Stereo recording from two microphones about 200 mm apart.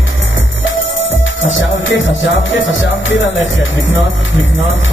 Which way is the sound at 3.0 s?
70° left (ahead or behind).